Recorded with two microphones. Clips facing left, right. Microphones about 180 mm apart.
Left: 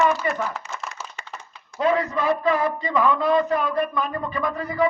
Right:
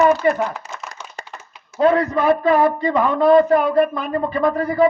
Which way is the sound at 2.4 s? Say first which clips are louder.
Right 6 dB; 30° right (ahead or behind).